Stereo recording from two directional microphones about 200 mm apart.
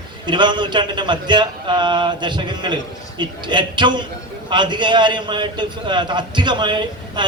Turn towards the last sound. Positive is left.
turn(degrees=-20)  # may be behind; listen again after turning